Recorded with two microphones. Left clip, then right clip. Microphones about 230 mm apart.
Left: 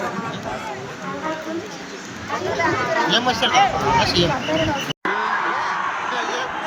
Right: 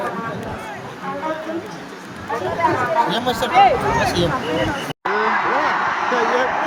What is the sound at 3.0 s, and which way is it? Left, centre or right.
Speech, right.